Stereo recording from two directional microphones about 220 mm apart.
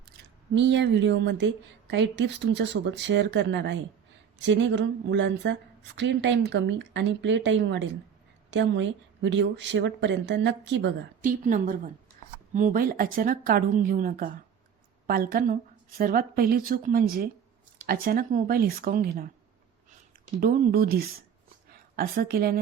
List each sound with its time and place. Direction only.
0.5 s speech: 55° right (ahead or behind)
11.2 s speech: 35° right (ahead or behind)
20.4 s a woman's voice: 40° right (ahead or behind)